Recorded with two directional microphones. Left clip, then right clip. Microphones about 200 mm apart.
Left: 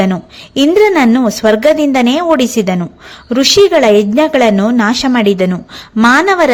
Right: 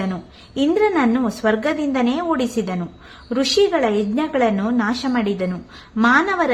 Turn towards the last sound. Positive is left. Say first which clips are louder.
# left 8 dB
turn(degrees=35)  # may be behind; listen again after turning